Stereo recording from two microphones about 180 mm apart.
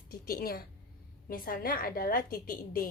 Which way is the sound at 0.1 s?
55° left (ahead or behind).